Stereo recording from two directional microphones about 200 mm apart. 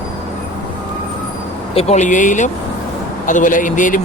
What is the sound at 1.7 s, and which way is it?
A man's voice, 35° left (ahead or behind).